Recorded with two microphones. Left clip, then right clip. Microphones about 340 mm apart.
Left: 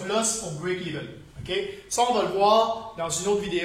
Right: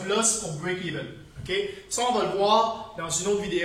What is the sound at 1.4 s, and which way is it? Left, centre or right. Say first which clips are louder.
A man's voice: right 1 dB; centre.